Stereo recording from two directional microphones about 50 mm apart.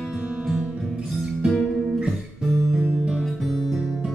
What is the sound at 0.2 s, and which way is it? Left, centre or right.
Music, right.